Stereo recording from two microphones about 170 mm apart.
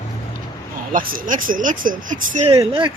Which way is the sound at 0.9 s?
55° right (ahead or behind).